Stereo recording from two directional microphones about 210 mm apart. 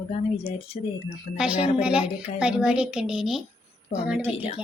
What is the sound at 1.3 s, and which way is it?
Speech, 45° left (ahead or behind).